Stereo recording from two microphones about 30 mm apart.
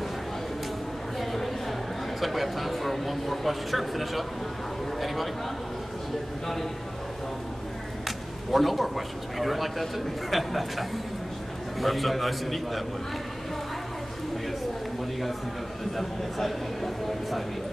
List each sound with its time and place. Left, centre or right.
1.2 s a sound: centre
5.0 s a man's voice: centre
6.4 s speech: centre
8.5 s a man's voice: centre
16.0 s a man's voice: centre